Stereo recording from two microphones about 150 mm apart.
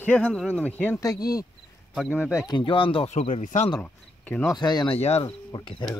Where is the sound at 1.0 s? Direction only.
25° left (ahead or behind).